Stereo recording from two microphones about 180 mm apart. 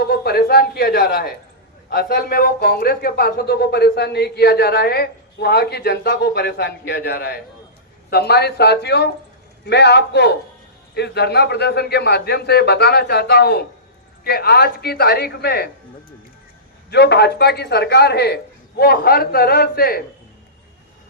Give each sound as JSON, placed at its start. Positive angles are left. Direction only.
{"t": 0.0, "sound": "a man's voice", "side_deg": 60}
{"t": 16.9, "sound": "speech", "side_deg": 65}